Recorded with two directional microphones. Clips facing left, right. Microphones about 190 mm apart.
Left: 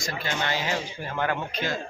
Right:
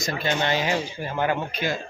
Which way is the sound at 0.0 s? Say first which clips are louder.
Right 5 dB; 20° right (ahead or behind).